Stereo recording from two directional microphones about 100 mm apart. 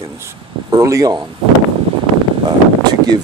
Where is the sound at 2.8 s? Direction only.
45° right (ahead or behind).